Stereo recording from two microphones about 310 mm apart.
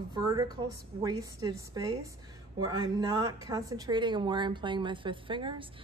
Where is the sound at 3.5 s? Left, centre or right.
Centre.